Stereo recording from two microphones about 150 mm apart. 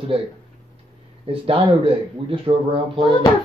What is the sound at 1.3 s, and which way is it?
Speech, 35° right (ahead or behind).